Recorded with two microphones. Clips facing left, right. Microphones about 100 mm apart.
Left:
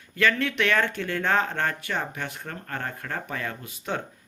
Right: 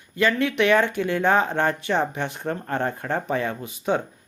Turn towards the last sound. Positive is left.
turn(degrees=-20)  # may be behind; listen again after turning